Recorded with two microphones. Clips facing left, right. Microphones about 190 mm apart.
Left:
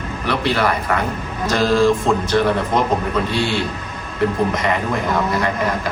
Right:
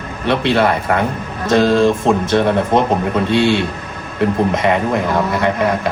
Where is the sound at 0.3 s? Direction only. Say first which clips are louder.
Right 5 dB; 25° right (ahead or behind).